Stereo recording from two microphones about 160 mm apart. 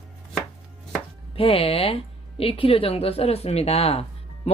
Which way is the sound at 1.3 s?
35° left (ahead or behind).